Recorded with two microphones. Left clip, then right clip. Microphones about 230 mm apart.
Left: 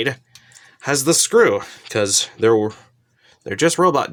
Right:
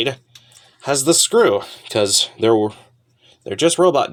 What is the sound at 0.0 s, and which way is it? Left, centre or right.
Speech, left.